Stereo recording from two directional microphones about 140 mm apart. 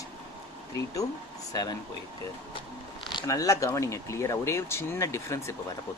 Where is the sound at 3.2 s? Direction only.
25° left (ahead or behind).